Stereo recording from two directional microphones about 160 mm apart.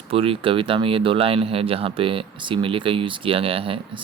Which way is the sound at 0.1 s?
35° right (ahead or behind).